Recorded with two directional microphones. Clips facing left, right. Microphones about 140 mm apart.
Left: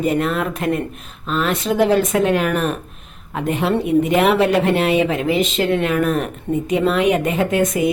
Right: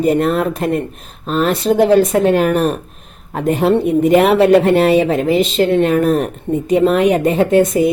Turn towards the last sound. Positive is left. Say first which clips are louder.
# right 6 dB
turn(degrees=-35)  # may be behind; listen again after turning